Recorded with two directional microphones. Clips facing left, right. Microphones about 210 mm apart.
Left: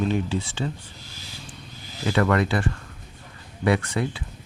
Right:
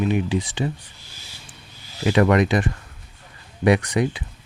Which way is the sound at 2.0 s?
15° right (ahead or behind).